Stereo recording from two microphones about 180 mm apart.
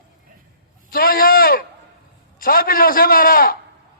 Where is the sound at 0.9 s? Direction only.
55° left (ahead or behind).